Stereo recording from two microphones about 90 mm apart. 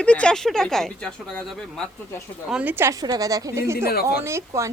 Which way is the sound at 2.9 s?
45° right (ahead or behind).